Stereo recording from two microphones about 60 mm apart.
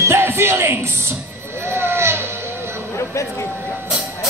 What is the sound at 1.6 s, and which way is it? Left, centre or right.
Vehicle, right.